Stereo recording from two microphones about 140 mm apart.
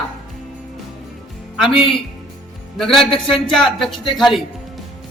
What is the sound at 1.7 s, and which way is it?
Speech, 40° left (ahead or behind).